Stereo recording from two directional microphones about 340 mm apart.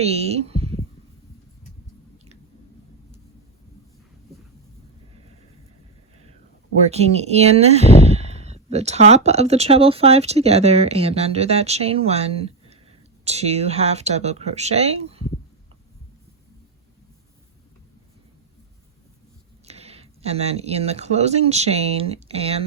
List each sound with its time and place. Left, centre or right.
0.0 s speech: centre
2.1 s chewing: centre
6.7 s speech: centre
19.6 s speech: centre